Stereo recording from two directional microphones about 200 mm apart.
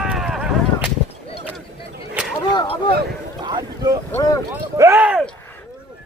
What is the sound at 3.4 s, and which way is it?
Boat, 20° right (ahead or behind).